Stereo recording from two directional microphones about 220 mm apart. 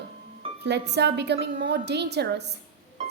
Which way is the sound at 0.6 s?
50° right (ahead or behind).